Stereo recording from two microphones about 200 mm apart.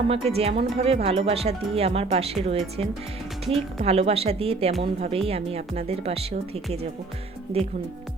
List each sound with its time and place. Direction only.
0.1 s speech: 30° right (ahead or behind)